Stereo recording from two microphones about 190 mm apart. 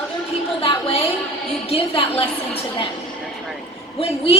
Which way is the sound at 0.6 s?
30° left (ahead or behind).